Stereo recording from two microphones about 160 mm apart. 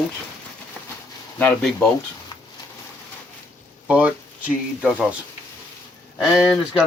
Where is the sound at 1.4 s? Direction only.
5° left (ahead or behind).